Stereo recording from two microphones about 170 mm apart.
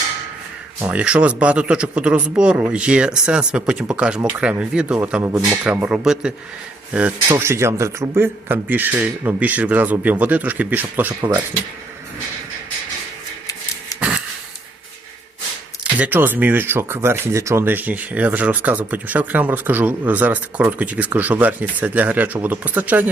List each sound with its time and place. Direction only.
0.8 s speech: 5° right (ahead or behind)
7.3 s speech: 15° right (ahead or behind)
11.2 s speech: 25° right (ahead or behind)
13.9 s sniff: 20° left (ahead or behind)
15.8 s speech: 10° right (ahead or behind)